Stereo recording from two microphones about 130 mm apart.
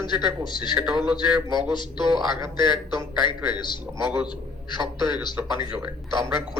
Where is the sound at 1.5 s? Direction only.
35° left (ahead or behind).